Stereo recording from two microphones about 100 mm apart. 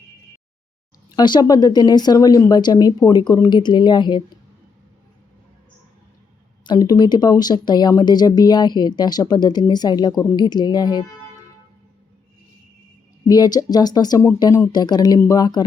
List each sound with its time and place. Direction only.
1.1 s speech: 45° left (ahead or behind)
6.7 s speech: 40° left (ahead or behind)
13.2 s speech: 40° left (ahead or behind)